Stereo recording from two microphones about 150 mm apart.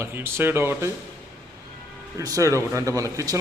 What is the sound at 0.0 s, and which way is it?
Speech, 15° right (ahead or behind).